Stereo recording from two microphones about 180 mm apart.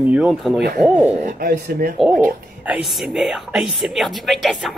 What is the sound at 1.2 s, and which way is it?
Speech, 55° right (ahead or behind).